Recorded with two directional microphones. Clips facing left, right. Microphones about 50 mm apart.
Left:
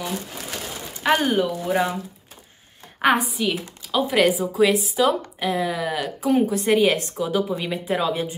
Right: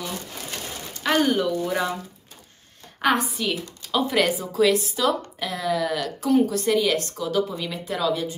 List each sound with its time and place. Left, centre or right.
0.9 s speech: centre
3.0 s a woman's voice: centre